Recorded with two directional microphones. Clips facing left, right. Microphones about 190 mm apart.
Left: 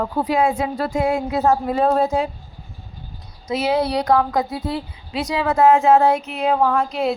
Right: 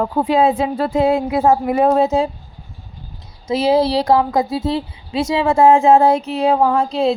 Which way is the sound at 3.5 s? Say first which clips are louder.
Right 5 dB; 30° right (ahead or behind).